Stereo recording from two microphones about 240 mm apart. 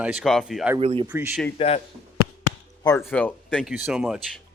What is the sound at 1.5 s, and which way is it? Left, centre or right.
Speech, left.